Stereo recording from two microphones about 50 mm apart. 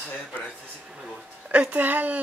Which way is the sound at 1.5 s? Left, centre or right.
Right.